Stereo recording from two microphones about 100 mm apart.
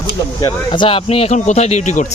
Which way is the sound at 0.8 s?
70° left (ahead or behind).